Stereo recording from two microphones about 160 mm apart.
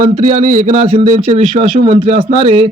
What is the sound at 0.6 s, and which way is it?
Speech, 50° right (ahead or behind).